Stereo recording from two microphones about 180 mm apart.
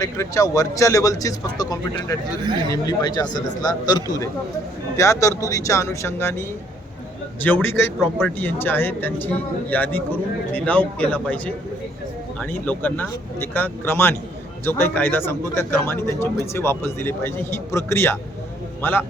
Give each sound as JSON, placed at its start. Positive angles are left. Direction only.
{"t": 0.0, "sound": "speech", "side_deg": 15}
{"t": 7.4, "sound": "a man's voice", "side_deg": 10}